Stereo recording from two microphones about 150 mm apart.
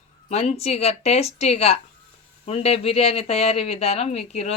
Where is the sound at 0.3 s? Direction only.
45° left (ahead or behind).